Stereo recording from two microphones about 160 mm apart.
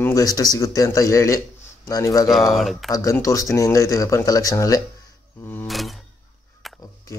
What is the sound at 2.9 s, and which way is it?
Speech, 20° left (ahead or behind).